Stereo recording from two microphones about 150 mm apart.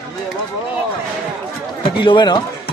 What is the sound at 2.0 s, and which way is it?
Speech, 30° left (ahead or behind).